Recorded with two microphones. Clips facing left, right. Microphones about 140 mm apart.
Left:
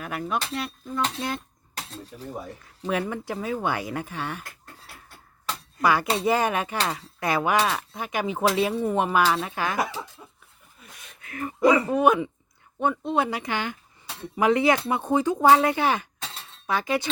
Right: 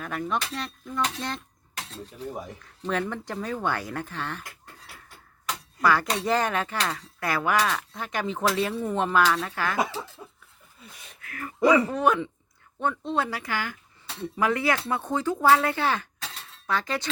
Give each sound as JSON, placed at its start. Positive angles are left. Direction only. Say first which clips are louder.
{"t": 0.0, "sound": "dishes", "louder": "even", "side_deg": 5}
{"t": 2.8, "sound": "speech", "louder": "left 2 dB", "side_deg": 10}
{"t": 5.8, "sound": "speech", "louder": "left 2 dB", "side_deg": 15}
{"t": 6.8, "sound": "cutlery", "louder": "left 2 dB", "side_deg": 15}
{"t": 7.8, "sound": "speech", "louder": "left 2 dB", "side_deg": 15}
{"t": 9.2, "sound": "cutlery", "louder": "left 1 dB", "side_deg": 20}
{"t": 11.2, "sound": "speech", "louder": "left 2 dB", "side_deg": 20}